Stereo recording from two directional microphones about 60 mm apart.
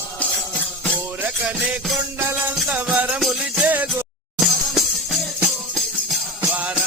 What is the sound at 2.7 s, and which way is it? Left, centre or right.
Music, right.